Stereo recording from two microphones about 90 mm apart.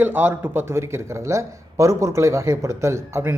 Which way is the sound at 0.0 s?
20° right (ahead or behind).